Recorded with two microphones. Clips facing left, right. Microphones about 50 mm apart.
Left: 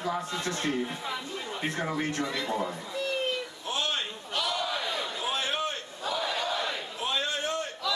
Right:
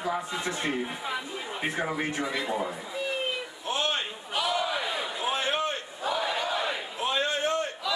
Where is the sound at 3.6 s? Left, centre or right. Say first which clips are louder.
Right 3 dB; right.